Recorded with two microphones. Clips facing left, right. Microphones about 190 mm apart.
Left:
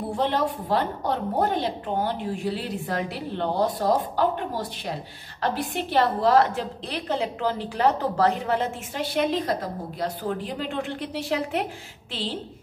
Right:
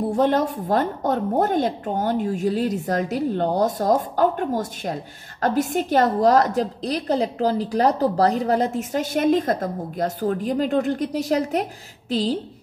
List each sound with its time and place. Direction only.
0.1 s a woman's voice: 45° right (ahead or behind)